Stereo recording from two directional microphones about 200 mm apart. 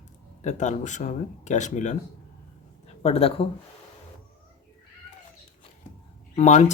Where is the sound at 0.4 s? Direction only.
35° left (ahead or behind).